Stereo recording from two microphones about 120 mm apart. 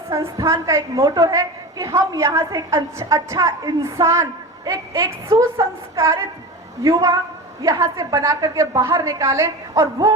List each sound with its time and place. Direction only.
0.1 s a woman's voice: 25° right (ahead or behind)